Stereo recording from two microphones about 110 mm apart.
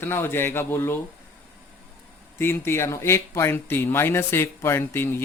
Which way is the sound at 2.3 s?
20° left (ahead or behind).